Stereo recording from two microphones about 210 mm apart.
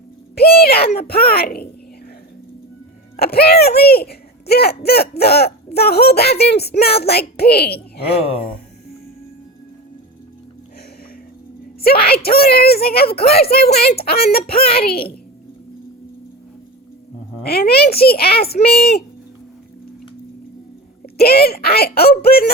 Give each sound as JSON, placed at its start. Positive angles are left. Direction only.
{"t": 0.3, "sound": "speech", "side_deg": 45}
{"t": 3.2, "sound": "speech", "side_deg": 50}
{"t": 8.1, "sound": "speech", "side_deg": 25}
{"t": 11.8, "sound": "speech", "side_deg": 45}
{"t": 17.4, "sound": "speech", "side_deg": 45}
{"t": 21.2, "sound": "speech", "side_deg": 50}